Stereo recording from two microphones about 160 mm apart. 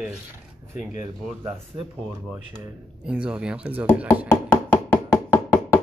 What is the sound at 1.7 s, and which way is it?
Speech, 30° right (ahead or behind).